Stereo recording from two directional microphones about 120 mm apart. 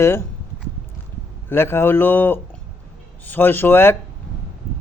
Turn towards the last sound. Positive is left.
turn(degrees=20)  # may be behind; listen again after turning